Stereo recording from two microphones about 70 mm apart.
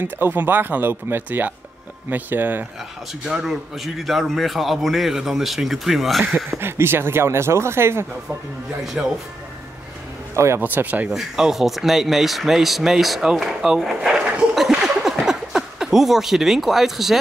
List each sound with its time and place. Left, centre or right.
0.0 s speech: right
3.3 s speech: centre
6.6 s speech: right
9.0 s speech: centre
10.3 s a man's voice: right
10.6 s speech: right
11.1 s speech: centre
14.7 s a sound: centre